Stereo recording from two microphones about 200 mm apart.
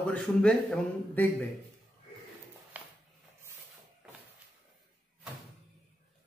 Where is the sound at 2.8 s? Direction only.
10° right (ahead or behind).